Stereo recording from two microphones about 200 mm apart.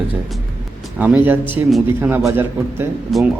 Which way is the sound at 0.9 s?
10° right (ahead or behind).